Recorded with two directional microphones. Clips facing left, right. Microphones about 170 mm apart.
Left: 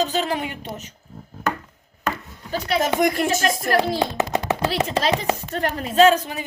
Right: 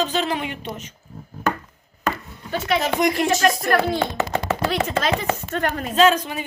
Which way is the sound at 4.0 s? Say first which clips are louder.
Left 1 dB; 15° left (ahead or behind).